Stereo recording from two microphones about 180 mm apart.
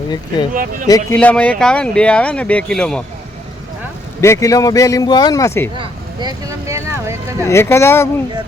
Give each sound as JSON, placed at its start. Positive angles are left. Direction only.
{"t": 0.5, "sound": "speech", "side_deg": -50}
{"t": 0.9, "sound": "speech", "side_deg": 20}
{"t": 1.2, "sound": "speech", "side_deg": 5}
{"t": 4.2, "sound": "a man's voice", "side_deg": 15}
{"t": 5.7, "sound": "speech", "side_deg": -25}
{"t": 7.4, "sound": "a man's voice", "side_deg": 15}